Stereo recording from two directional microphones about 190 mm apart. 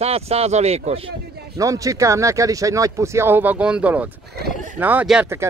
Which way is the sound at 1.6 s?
15° right (ahead or behind).